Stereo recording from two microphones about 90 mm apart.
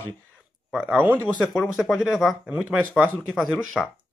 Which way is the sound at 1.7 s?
5° right (ahead or behind).